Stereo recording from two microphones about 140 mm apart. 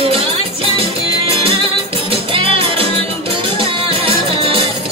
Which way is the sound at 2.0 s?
45° right (ahead or behind).